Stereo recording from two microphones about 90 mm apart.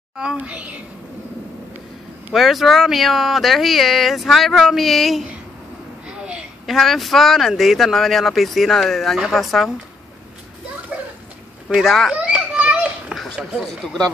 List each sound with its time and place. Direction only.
0.2 s a woman's voice: 10° right (ahead or behind)
2.3 s speech: centre (ahead or behind)
6.0 s a sound: 15° right (ahead or behind)
6.6 s speech: centre (ahead or behind)
11.7 s speech: 5° right (ahead or behind)
12.2 s children playing: 15° right (ahead or behind)
13.1 s a sound: 5° right (ahead or behind)
13.6 s speech: 5° left (ahead or behind)